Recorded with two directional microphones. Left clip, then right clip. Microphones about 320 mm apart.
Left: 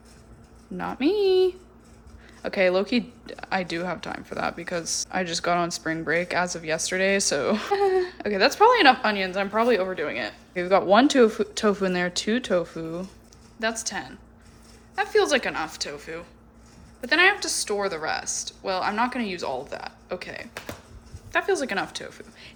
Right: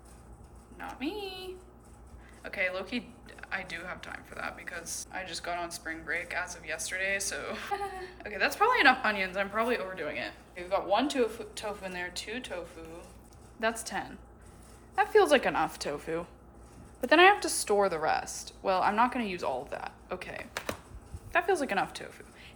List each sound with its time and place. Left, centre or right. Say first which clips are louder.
0.8 s speech: left 14 dB; centre
13.6 s a woman's voice: left 4 dB; centre